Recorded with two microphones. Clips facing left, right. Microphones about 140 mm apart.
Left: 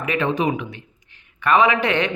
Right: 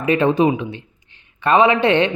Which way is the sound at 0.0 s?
30° right (ahead or behind).